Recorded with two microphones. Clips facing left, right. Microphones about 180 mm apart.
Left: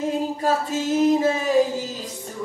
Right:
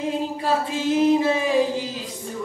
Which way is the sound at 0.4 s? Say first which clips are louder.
Left 1 dB; 45° left (ahead or behind).